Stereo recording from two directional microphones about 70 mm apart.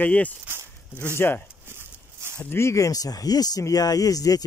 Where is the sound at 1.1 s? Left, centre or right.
Left.